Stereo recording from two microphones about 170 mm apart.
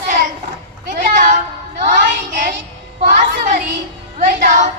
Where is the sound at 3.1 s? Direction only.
50° right (ahead or behind).